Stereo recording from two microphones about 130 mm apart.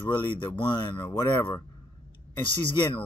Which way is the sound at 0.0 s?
40° left (ahead or behind).